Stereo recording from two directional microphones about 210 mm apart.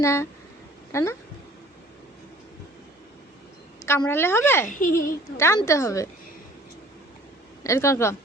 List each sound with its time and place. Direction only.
0.0 s a woman's voice: 10° left (ahead or behind)
3.8 s a woman's voice: 10° left (ahead or behind)
4.7 s a child's voice: 40° left (ahead or behind)
5.4 s a woman's voice: 15° left (ahead or behind)
7.6 s a woman's voice: 15° left (ahead or behind)